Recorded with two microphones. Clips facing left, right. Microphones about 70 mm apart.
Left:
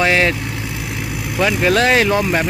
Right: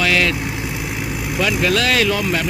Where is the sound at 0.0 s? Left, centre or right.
Left.